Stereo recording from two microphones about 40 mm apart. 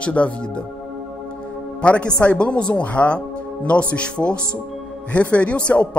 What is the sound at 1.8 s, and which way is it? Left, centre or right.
Speech, left.